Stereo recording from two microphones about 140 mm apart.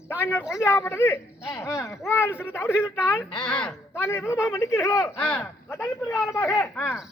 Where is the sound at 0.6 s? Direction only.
20° left (ahead or behind).